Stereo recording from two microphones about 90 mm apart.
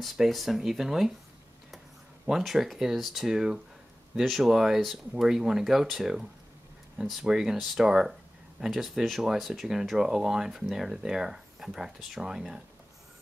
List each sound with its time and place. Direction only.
0.0 s speech: centre (ahead or behind)
2.2 s speech: 5° right (ahead or behind)